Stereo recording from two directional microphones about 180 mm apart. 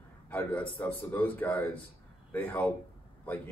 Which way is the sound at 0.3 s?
10° left (ahead or behind).